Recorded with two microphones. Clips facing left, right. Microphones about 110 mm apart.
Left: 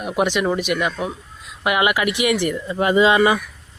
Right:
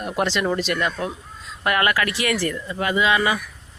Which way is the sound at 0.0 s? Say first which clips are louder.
Left 3 dB; 5° left (ahead or behind).